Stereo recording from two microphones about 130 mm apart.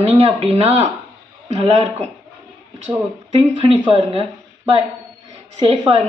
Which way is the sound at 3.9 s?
45° right (ahead or behind).